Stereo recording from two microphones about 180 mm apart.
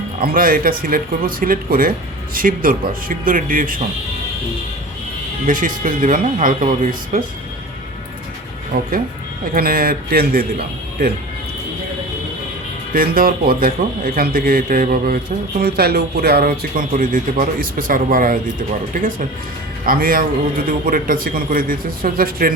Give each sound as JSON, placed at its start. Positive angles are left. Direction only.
{"t": 0.2, "sound": "speech", "side_deg": -50}
{"t": 5.5, "sound": "speech", "side_deg": -50}
{"t": 8.7, "sound": "speech", "side_deg": -50}
{"t": 12.9, "sound": "speech", "side_deg": -55}